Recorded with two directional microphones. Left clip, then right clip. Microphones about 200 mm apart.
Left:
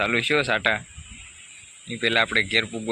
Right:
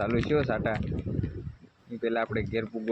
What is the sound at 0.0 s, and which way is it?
Speech, 15° left (ahead or behind).